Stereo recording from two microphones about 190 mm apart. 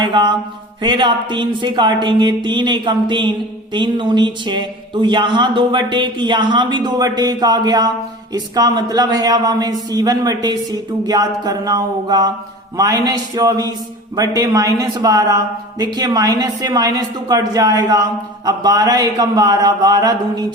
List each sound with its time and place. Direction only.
0.0 s speech: 25° right (ahead or behind)